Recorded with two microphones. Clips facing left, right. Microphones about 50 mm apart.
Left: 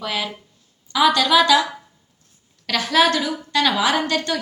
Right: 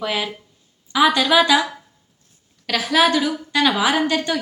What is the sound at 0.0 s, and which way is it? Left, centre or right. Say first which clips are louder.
A woman's voice: right 2 dB; centre.